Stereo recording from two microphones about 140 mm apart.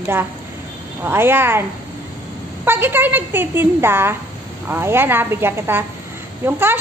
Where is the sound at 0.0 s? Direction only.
15° right (ahead or behind).